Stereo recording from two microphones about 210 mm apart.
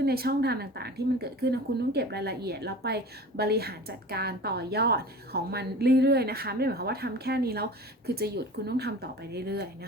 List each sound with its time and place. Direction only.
0.0 s speech: 50° right (ahead or behind)